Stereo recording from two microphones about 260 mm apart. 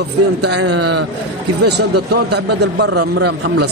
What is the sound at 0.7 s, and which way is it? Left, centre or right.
A man's voice, right.